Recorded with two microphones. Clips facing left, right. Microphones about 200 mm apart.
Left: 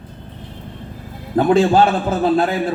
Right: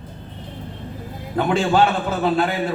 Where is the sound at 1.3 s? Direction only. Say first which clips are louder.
Left 6 dB; 40° left (ahead or behind).